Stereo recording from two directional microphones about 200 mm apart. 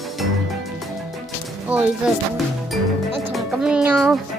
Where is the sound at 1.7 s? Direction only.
5° right (ahead or behind).